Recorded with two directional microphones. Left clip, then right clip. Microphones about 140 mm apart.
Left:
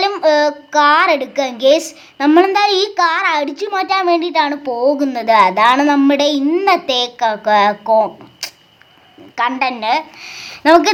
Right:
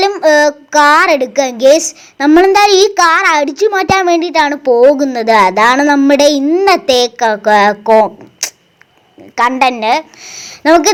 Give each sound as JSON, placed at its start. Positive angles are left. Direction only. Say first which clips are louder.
{"t": 0.2, "sound": "child singing", "louder": "right 4 dB", "side_deg": -35}
{"t": 2.6, "sound": "child singing", "louder": "right 6 dB", "side_deg": -45}
{"t": 6.4, "sound": "speech", "louder": "right 5 dB", "side_deg": -20}
{"t": 6.7, "sound": "child singing", "louder": "right 6 dB", "side_deg": -40}
{"t": 9.3, "sound": "a woman's voice", "louder": "right 6 dB", "side_deg": -40}